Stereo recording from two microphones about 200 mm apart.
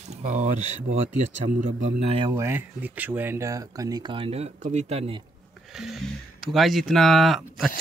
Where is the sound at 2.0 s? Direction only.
25° right (ahead or behind).